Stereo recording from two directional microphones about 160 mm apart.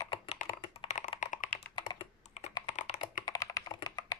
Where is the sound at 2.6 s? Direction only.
50° left (ahead or behind).